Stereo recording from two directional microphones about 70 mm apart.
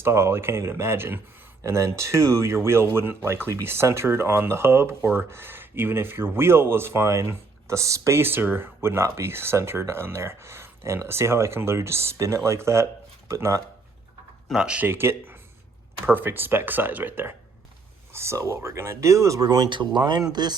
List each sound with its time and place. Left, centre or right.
0.0 s speech: right
14.5 s speech: centre
14.8 s speech: right